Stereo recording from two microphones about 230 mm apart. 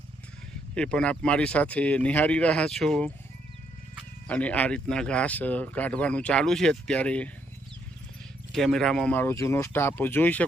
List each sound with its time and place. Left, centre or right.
0.8 s speech: centre
4.3 s speech: centre
8.5 s speech: centre